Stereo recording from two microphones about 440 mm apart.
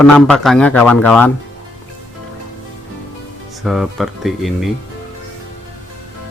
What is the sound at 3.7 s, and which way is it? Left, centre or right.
Speech, centre.